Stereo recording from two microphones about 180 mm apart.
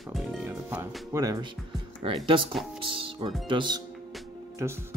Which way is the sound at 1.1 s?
20° right (ahead or behind).